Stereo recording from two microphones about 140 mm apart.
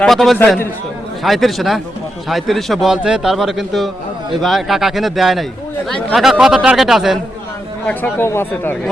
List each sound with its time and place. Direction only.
0.0 s a man's voice: centre (ahead or behind)
7.9 s speech: 15° left (ahead or behind)